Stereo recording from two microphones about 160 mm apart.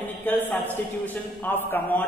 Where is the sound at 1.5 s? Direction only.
15° left (ahead or behind).